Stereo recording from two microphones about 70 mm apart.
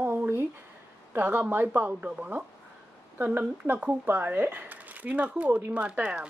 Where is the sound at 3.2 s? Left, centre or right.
Right.